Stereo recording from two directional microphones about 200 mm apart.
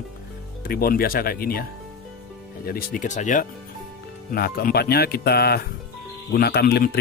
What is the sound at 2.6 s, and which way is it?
Speech, 45° left (ahead or behind).